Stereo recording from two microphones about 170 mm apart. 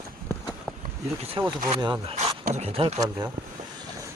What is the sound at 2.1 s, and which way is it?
Speech, 40° right (ahead or behind).